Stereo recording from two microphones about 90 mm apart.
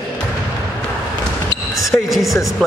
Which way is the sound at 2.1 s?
Centre (ahead or behind).